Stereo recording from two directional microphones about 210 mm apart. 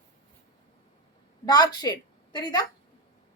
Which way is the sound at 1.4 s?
20° left (ahead or behind).